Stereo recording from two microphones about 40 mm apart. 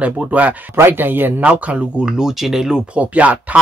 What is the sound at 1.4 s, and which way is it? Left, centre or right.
Speech, right.